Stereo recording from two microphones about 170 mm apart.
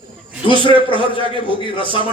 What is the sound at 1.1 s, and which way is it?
Speech, 30° left (ahead or behind).